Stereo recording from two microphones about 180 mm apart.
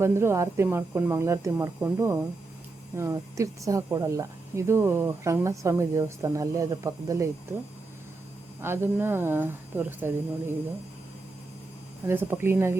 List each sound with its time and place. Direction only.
0.0 s a woman's voice: 15° right (ahead or behind)
8.6 s a woman's voice: 10° right (ahead or behind)
12.0 s a woman's voice: 15° right (ahead or behind)